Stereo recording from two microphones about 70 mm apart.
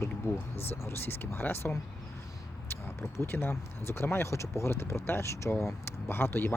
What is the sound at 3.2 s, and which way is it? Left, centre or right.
Speech, left.